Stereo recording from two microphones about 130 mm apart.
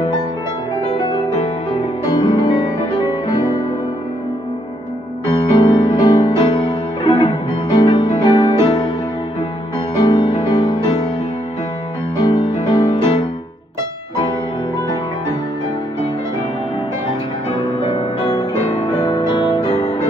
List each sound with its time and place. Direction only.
2.0 s music: 30° left (ahead or behind)
5.2 s music: 30° left (ahead or behind)
9.9 s music: 35° left (ahead or behind)
12.2 s music: 30° left (ahead or behind)
18.3 s music: 30° left (ahead or behind)